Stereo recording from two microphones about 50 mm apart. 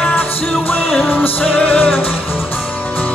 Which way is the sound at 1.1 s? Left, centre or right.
Left.